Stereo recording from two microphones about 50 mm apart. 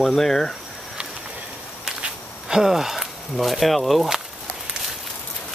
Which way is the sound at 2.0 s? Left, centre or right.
Centre.